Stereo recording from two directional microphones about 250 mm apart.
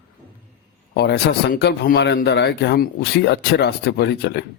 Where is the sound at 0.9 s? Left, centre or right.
Left.